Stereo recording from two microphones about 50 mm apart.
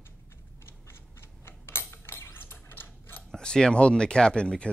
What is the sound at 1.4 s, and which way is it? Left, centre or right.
Mechanisms, left.